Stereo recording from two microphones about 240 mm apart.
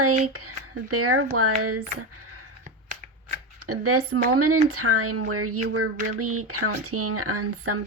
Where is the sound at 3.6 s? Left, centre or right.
Right.